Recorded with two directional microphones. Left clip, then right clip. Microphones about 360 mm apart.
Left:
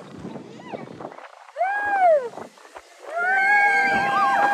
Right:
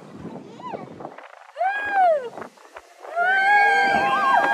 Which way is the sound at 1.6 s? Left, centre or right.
Left.